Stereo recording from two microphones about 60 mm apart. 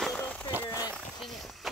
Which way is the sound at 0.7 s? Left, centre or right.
Right.